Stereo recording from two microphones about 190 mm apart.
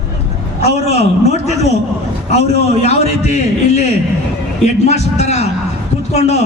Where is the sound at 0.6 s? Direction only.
35° left (ahead or behind).